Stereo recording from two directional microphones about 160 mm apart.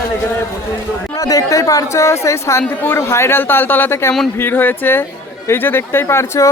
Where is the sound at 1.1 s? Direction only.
20° left (ahead or behind).